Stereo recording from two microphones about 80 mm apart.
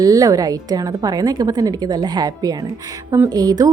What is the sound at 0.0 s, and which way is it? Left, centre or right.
A woman's voice, right.